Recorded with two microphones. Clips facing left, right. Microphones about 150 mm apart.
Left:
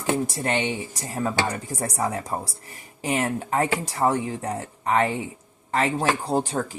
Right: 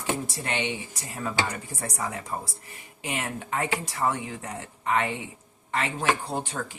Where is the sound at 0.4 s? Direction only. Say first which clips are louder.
Left 4 dB; 45° left (ahead or behind).